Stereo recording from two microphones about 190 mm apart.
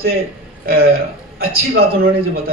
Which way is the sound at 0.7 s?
55° right (ahead or behind).